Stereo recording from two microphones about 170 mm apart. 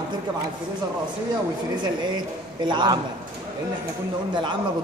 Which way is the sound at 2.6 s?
25° right (ahead or behind).